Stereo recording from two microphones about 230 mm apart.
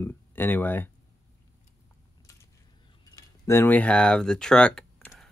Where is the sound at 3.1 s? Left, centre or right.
Centre.